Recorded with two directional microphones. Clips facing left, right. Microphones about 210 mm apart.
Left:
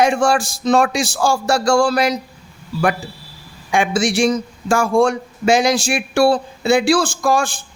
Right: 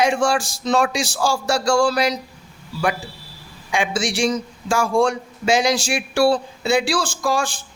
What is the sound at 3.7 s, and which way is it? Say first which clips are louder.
Speech: left 5 dB; 50° left (ahead or behind).